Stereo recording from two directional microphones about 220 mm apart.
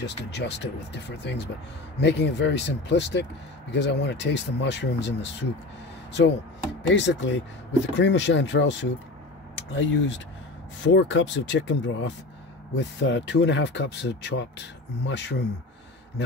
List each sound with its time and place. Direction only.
0.0 s speech: 50° left (ahead or behind)
6.9 s speech: 55° left (ahead or behind)